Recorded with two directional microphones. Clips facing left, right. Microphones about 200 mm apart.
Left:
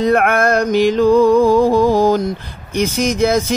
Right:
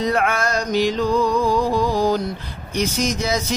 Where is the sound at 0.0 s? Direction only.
55° left (ahead or behind).